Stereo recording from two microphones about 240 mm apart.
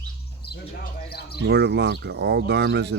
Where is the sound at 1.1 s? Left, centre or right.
Left.